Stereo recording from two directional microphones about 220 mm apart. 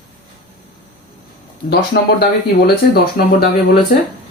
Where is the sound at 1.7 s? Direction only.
45° left (ahead or behind).